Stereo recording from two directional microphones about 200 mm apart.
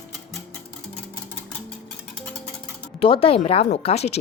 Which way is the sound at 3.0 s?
30° left (ahead or behind).